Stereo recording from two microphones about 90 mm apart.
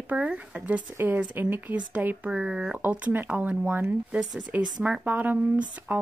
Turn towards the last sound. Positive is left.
turn(degrees=-15)  # may be behind; listen again after turning